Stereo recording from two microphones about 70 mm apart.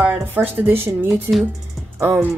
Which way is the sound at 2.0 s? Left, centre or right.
Right.